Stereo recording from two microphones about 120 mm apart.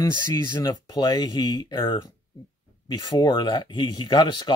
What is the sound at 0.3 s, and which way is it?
Speech, 35° left (ahead or behind).